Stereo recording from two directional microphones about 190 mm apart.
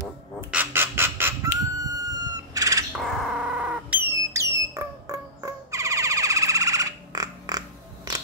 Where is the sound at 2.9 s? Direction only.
Centre (ahead or behind); by 7.6 s 20° right (ahead or behind).